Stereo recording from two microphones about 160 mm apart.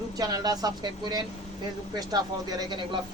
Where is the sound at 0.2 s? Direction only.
25° right (ahead or behind).